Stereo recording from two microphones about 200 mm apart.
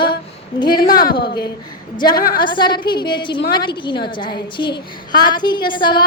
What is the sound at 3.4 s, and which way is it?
Speech, 50° left (ahead or behind).